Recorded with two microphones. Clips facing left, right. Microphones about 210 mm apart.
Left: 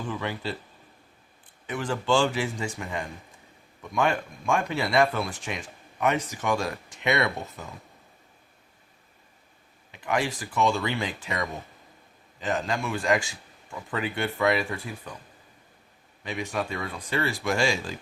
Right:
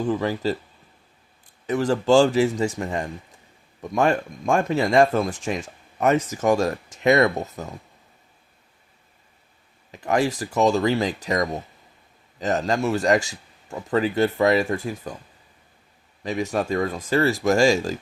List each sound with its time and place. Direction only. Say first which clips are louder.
0.1 s speech: right 7 dB; 40° right (ahead or behind)
1.6 s speech: right 8 dB; 40° right (ahead or behind)
9.9 s speech: right 6 dB; 40° right (ahead or behind)
16.2 s speech: right 6 dB; 40° right (ahead or behind)